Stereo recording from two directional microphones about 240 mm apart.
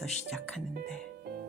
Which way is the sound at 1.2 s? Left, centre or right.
Right.